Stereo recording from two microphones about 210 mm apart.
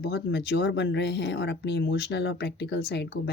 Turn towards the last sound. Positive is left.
turn(degrees=50)  # may be behind; listen again after turning